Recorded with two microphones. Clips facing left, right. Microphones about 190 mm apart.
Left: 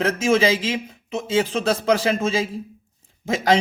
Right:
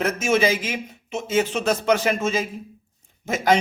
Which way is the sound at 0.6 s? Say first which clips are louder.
Left 4 dB; 30° left (ahead or behind).